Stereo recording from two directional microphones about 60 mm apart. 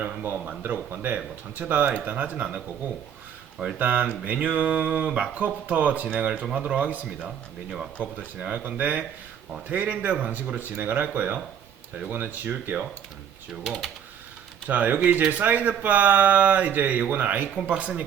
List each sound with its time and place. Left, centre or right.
0.0 s speech: right
3.8 s speech: right
13.7 s speech: centre
14.7 s speech: right
17.5 s speech: right